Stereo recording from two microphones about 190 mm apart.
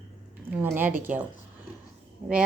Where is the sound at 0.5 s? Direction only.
10° right (ahead or behind).